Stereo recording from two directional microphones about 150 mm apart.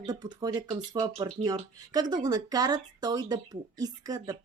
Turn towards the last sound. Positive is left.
turn(degrees=-25)  # may be behind; listen again after turning